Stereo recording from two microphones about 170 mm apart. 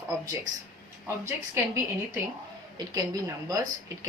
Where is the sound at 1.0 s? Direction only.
15° right (ahead or behind).